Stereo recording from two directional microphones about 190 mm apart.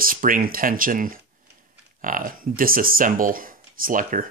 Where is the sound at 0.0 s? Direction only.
45° right (ahead or behind).